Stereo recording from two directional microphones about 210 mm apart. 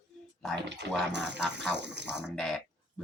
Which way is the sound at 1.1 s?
55° right (ahead or behind).